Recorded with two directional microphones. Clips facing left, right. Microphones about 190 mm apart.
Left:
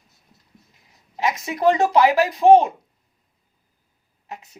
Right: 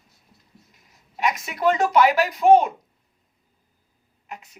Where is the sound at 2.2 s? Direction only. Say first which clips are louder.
Left 2 dB; 30° left (ahead or behind).